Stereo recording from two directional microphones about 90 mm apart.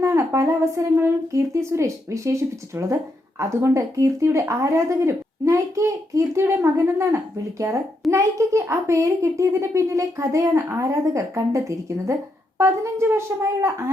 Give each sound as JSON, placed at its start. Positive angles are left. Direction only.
{"t": 0.0, "sound": "speech", "side_deg": -30}